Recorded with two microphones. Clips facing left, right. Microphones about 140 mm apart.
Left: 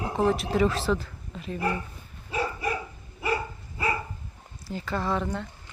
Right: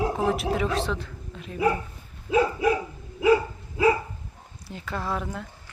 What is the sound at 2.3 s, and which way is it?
Dog, 90° right.